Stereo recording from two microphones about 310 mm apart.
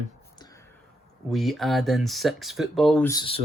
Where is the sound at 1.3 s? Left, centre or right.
Centre.